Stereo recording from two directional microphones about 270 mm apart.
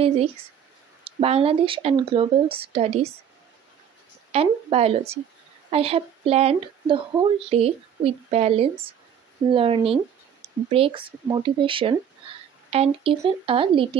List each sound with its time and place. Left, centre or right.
1.0 s a woman's voice: right
4.3 s a woman's voice: right